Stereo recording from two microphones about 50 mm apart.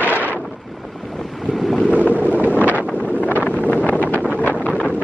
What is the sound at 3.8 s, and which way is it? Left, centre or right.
Wind noise, left.